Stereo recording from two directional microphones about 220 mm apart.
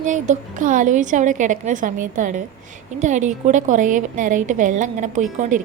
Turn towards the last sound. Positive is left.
turn(degrees=-35)  # may be behind; listen again after turning